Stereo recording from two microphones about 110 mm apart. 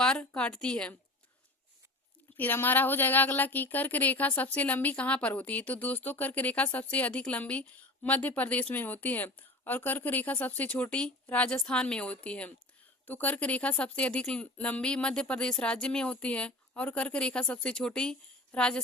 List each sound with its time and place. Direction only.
0.0 s a woman's voice: 10° left (ahead or behind)
2.3 s a woman's voice: 15° left (ahead or behind)